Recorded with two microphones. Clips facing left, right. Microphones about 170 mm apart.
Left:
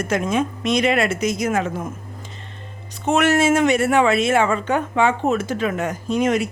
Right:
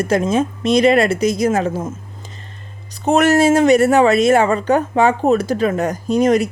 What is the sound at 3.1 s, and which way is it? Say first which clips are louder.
Speech: right 4 dB; 40° right (ahead or behind).